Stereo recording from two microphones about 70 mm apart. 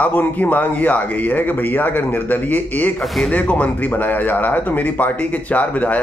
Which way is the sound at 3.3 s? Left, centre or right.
Centre.